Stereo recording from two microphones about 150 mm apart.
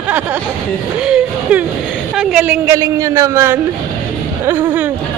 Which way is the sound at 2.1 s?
5° right (ahead or behind).